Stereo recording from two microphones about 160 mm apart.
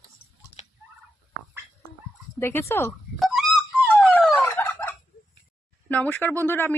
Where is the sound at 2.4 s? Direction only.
15° left (ahead or behind).